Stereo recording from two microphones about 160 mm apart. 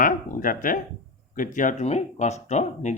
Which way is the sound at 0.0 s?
60° left (ahead or behind).